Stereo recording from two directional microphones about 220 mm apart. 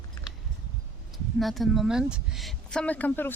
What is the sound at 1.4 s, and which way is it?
Speech, centre (ahead or behind).